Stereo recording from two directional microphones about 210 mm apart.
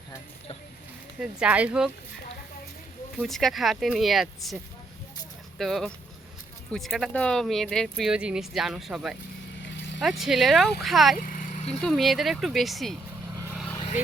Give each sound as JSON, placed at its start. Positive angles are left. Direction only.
{"t": 1.2, "sound": "speech", "side_deg": -5}
{"t": 3.2, "sound": "speech", "side_deg": 0}
{"t": 5.5, "sound": "speech", "side_deg": 0}
{"t": 11.2, "sound": "vehicle", "side_deg": 40}
{"t": 11.8, "sound": "speech", "side_deg": 0}
{"t": 13.3, "sound": "vehicle", "side_deg": -15}